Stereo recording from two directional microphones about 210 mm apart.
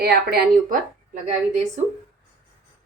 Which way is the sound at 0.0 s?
45° right (ahead or behind).